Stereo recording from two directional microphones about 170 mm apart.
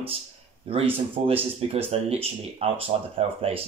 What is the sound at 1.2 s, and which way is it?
Speech, 35° right (ahead or behind).